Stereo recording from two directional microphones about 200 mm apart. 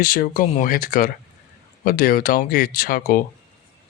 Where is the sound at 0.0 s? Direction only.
45° left (ahead or behind).